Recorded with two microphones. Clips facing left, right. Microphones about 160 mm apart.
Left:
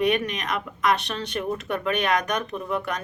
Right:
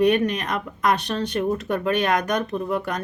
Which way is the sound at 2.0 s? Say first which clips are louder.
Right 2 dB; 30° right (ahead or behind).